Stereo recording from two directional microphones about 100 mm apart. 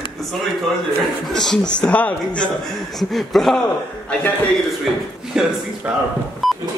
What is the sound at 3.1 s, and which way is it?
Speech, centre (ahead or behind).